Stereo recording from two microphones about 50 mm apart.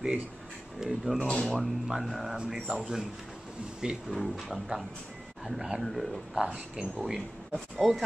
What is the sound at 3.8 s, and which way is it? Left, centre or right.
Speech, centre.